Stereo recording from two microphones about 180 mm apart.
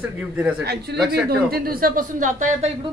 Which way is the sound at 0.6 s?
65° right (ahead or behind).